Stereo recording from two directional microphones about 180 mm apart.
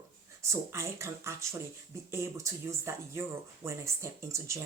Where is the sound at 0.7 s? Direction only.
15° right (ahead or behind).